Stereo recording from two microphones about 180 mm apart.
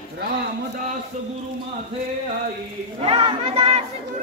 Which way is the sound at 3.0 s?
30° right (ahead or behind).